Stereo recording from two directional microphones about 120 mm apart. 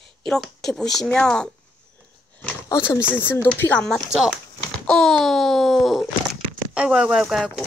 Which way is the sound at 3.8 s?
Centre (ahead or behind).